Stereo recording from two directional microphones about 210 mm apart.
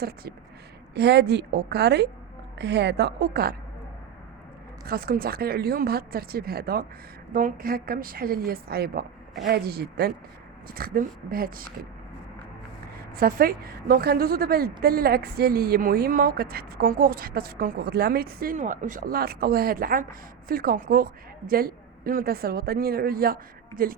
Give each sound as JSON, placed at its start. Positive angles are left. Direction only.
{"t": 0.9, "sound": "a woman's voice", "side_deg": -50}
{"t": 4.9, "sound": "a woman's voice", "side_deg": -45}
{"t": 13.1, "sound": "a woman's voice", "side_deg": -45}